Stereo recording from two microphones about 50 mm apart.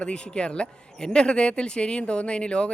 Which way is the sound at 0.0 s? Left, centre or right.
Centre.